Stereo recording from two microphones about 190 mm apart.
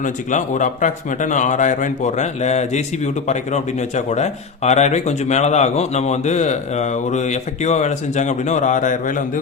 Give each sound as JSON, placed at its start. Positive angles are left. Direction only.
{"t": 0.0, "sound": "speech", "side_deg": 40}